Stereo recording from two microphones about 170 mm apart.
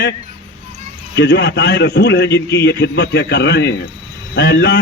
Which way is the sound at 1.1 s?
90° left.